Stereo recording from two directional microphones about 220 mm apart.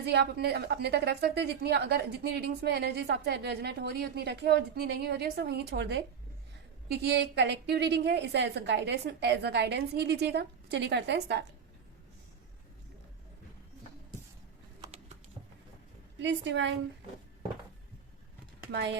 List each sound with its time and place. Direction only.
0.0 s a woman's voice: 50° right (ahead or behind)
16.1 s a woman's voice: 55° right (ahead or behind)